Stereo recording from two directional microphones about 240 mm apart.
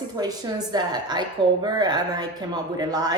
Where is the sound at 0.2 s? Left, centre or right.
Centre.